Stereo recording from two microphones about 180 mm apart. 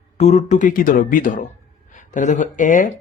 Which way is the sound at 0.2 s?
40° left (ahead or behind).